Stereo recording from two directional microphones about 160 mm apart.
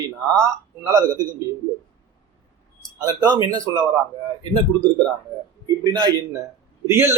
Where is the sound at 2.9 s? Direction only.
15° right (ahead or behind).